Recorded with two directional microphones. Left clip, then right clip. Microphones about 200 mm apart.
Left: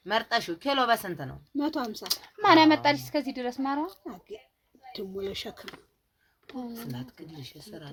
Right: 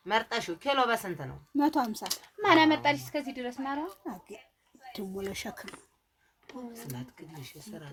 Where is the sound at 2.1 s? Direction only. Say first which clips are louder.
Left 4 dB; 45° left (ahead or behind).